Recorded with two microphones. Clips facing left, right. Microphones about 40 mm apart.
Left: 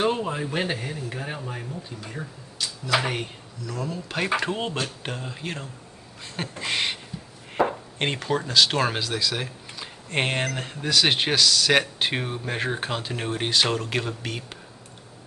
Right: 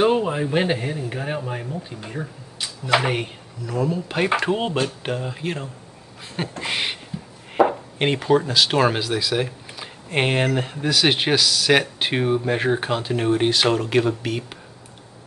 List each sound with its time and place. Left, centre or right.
0.0 s speech: centre
3.0 s speech: centre
6.6 s beatboxing: centre
7.5 s speech: centre